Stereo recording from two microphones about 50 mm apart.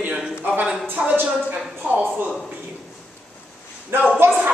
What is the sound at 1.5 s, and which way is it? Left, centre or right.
Speech, right.